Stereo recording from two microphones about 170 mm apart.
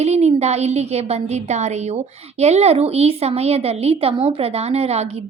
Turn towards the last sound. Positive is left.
turn(degrees=-40)  # may be behind; listen again after turning